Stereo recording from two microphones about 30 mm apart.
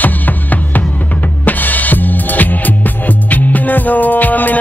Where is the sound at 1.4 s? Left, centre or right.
Left.